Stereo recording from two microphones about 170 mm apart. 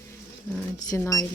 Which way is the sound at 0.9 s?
15° left (ahead or behind).